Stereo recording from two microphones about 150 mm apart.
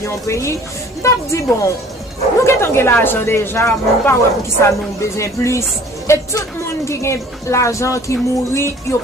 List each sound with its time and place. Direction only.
0.0 s a woman's voice: 20° left (ahead or behind)